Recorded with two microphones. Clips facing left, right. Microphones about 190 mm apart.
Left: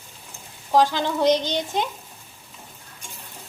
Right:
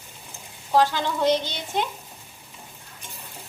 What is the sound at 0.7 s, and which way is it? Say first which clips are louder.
Speech: left 2 dB; 15° left (ahead or behind).